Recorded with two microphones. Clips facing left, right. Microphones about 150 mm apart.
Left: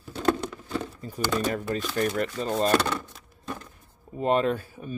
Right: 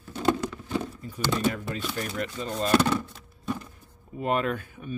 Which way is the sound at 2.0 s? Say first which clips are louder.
Left 5 dB; 45° left (ahead or behind).